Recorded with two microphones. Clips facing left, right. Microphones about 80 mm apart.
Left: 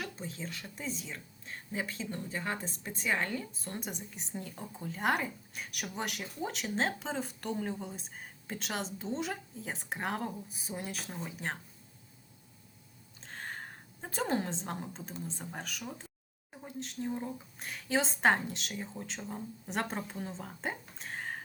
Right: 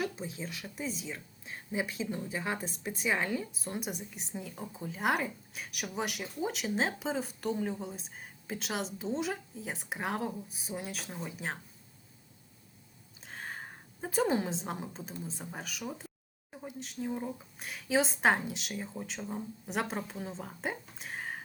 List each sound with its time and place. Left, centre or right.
0.0 s a woman's voice: centre
13.2 s a sound: centre
15.2 s speech: centre